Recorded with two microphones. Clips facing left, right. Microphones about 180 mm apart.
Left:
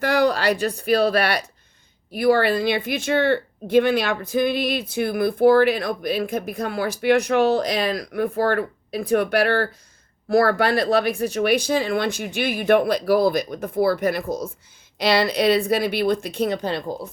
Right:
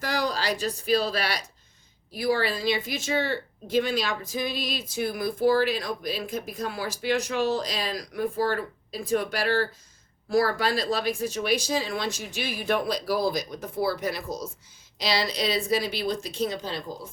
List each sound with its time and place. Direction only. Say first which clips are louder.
0.0 s speech: left 9 dB; 60° left (ahead or behind)